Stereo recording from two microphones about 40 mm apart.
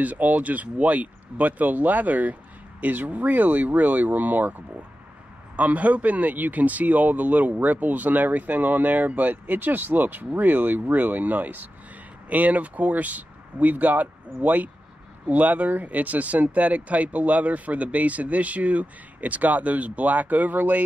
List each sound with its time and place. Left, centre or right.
0.0 s speech: right